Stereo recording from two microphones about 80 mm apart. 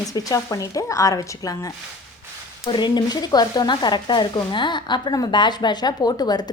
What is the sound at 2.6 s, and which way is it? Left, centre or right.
A woman's voice, left.